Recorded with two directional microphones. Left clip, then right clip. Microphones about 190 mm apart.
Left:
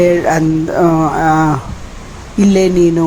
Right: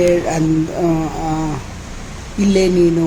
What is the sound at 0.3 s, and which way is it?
Speech, 20° left (ahead or behind).